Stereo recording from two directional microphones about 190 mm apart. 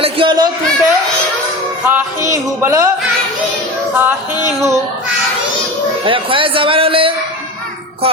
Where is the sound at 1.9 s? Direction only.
10° right (ahead or behind).